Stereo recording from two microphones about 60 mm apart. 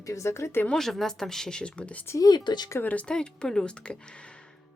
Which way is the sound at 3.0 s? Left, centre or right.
Centre.